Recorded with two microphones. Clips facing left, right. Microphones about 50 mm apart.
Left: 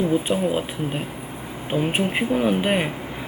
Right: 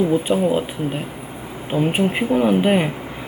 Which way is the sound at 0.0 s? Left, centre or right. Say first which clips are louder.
Right 3 dB; centre.